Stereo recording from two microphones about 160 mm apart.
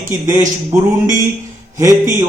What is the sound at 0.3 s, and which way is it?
Speech, 20° right (ahead or behind).